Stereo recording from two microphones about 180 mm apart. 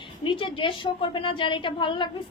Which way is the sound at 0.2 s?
25° left (ahead or behind).